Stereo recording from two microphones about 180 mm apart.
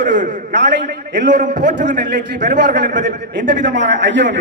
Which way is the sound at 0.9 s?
75° right (ahead or behind).